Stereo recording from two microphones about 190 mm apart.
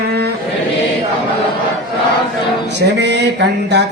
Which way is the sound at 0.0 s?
55° right (ahead or behind).